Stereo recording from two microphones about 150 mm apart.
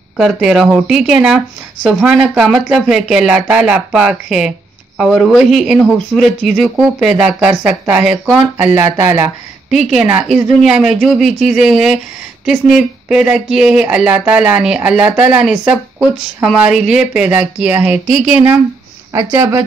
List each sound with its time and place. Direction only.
0.2 s speech: 5° right (ahead or behind)
19.1 s speech: 20° right (ahead or behind)